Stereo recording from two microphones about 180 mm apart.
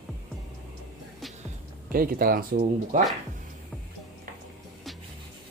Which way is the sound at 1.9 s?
55° right (ahead or behind).